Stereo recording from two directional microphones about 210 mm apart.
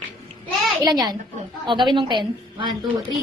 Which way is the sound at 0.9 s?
20° right (ahead or behind).